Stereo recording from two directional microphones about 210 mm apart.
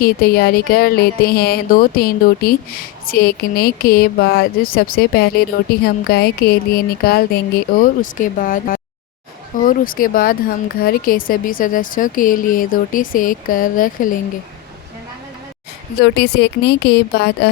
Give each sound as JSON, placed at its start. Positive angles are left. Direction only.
{"t": 0.0, "sound": "a woman's voice", "side_deg": 45}
{"t": 16.0, "sound": "speech", "side_deg": 50}